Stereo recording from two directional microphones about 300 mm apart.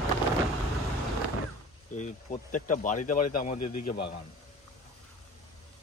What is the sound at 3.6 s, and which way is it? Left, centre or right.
Speech, left.